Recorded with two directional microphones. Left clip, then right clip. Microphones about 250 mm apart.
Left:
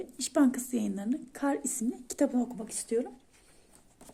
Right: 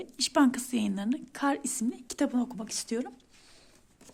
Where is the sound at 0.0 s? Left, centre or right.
Right.